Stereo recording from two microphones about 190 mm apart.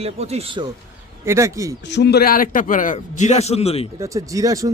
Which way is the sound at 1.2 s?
15° right (ahead or behind).